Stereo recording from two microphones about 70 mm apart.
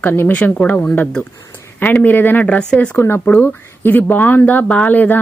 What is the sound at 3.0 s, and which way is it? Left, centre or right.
Speech, left.